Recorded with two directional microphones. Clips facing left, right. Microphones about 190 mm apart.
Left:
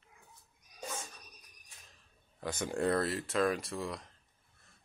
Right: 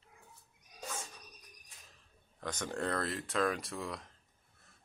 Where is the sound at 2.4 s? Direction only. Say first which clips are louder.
Left 4 dB; 10° left (ahead or behind).